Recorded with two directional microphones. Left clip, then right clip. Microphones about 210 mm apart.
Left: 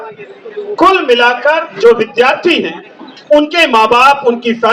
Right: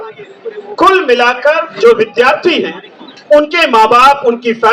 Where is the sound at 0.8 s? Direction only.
35° right (ahead or behind).